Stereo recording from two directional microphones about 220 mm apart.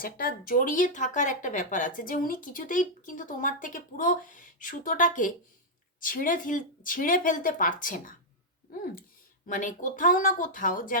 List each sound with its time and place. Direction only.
0.0 s speech: 40° left (ahead or behind)
9.5 s speech: 35° left (ahead or behind)